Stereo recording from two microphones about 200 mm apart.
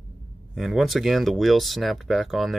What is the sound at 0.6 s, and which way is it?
Speech, centre (ahead or behind).